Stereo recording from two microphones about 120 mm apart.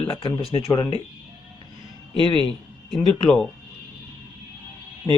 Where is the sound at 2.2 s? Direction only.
45° right (ahead or behind).